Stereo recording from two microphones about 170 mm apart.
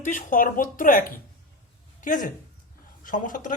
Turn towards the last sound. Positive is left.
turn(degrees=50)  # may be behind; listen again after turning